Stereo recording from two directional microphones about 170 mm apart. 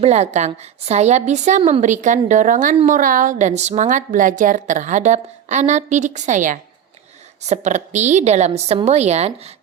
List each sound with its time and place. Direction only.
0.0 s a woman's voice: 40° right (ahead or behind)